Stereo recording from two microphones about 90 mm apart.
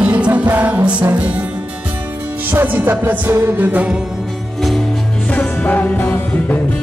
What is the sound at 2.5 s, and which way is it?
Music, 20° right (ahead or behind).